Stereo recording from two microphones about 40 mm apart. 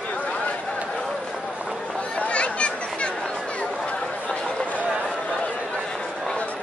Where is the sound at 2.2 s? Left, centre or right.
Left.